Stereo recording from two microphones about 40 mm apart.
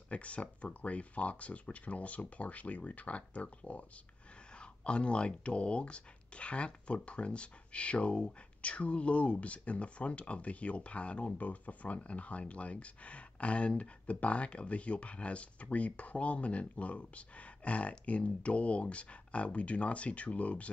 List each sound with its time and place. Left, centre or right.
0.1 s speech: left